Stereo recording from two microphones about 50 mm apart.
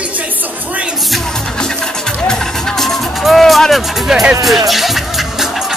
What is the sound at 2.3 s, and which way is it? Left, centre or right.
Music, centre.